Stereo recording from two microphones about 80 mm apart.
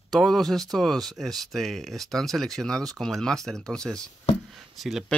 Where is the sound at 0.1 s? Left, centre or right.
Centre.